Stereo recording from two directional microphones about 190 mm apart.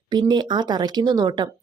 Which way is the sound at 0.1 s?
25° right (ahead or behind).